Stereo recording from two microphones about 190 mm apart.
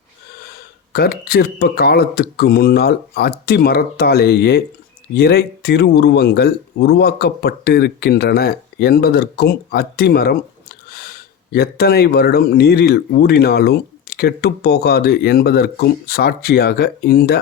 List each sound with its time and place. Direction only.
0.9 s speech: 55° left (ahead or behind)